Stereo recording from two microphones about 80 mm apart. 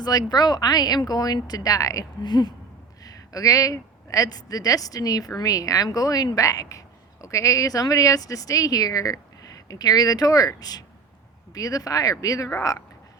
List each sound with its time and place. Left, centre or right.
0.0 s speech: left
2.2 s speech: left
3.0 s speech: left